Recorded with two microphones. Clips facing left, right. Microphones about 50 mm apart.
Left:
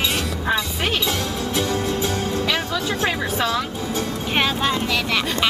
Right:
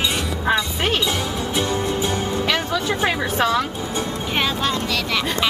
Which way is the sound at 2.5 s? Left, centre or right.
Right.